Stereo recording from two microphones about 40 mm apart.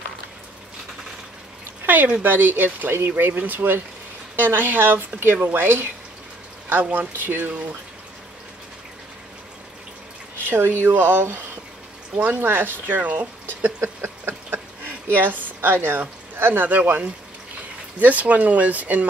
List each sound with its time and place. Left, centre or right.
1.9 s speech: right
5.2 s speech: right
7.0 s speech: right
10.5 s speech: right
12.2 s speech: right
12.8 s a woman's voice: right
13.6 s a sound: right
14.0 s a sound: right
15.0 s a woman's voice: right